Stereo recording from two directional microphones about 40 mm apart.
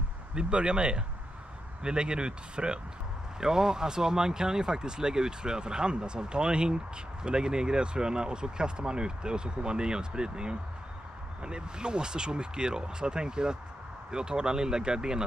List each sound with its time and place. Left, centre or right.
0.3 s speech: right